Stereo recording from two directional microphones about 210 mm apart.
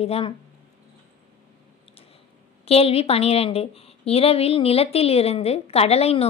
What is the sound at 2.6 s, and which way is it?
A woman's voice, 30° left (ahead or behind).